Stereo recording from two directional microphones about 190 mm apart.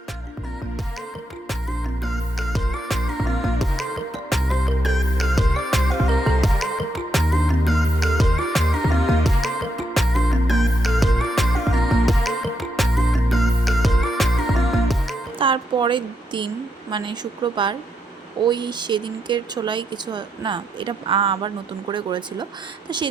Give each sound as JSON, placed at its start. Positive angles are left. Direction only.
{"t": 2.0, "sound": "music", "side_deg": 0}
{"t": 15.4, "sound": "a sound", "side_deg": -25}
{"t": 16.9, "sound": "speech", "side_deg": -25}